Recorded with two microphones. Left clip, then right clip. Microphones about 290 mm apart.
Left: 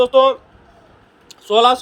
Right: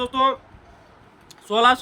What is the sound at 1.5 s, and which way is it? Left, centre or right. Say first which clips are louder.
Speech: left 4 dB; centre.